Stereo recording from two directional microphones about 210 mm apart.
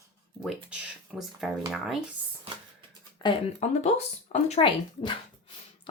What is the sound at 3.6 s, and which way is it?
Speech, 30° left (ahead or behind).